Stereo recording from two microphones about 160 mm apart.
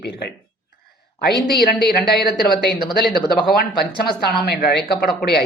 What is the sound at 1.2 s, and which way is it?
Speech, 80° left.